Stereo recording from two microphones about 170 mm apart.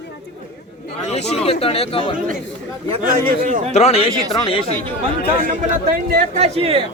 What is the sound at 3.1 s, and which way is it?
Speech, 50° right (ahead or behind).